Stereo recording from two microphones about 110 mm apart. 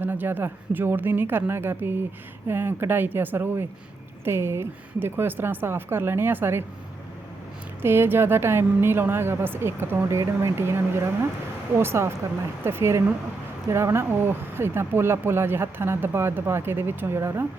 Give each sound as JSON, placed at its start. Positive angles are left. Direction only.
{"t": 0.0, "sound": "speech", "side_deg": -20}
{"t": 7.8, "sound": "speech", "side_deg": -20}